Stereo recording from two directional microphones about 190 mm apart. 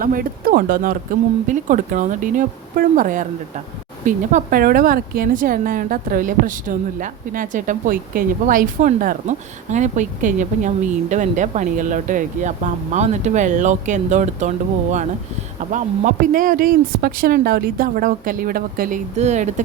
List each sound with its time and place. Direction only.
0.0 s a woman's voice: 50° right (ahead or behind)
15.7 s a woman's voice: 45° right (ahead or behind)